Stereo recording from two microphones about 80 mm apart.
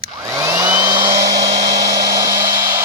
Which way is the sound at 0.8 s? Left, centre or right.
Right.